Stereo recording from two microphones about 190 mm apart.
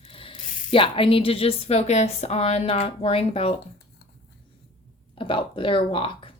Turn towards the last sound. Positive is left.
turn(degrees=30)  # may be behind; listen again after turning